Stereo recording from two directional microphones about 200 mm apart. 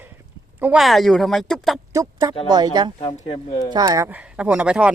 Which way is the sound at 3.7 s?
20° right (ahead or behind).